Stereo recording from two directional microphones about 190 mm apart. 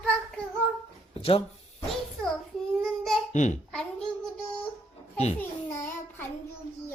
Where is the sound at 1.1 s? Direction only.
30° left (ahead or behind).